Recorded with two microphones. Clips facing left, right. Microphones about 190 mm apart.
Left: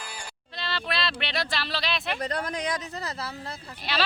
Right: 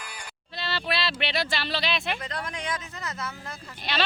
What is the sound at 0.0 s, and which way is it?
Music, 30° left (ahead or behind).